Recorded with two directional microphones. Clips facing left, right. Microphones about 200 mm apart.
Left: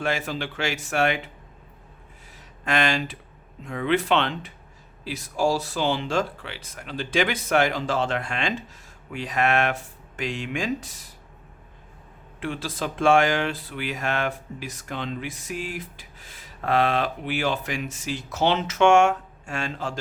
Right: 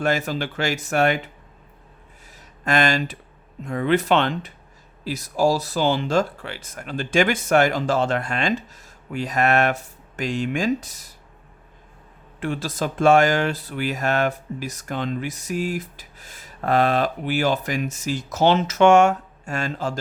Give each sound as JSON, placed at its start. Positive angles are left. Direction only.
{"t": 0.0, "sound": "speech", "side_deg": -45}
{"t": 2.6, "sound": "speech", "side_deg": -40}
{"t": 12.4, "sound": "speech", "side_deg": -45}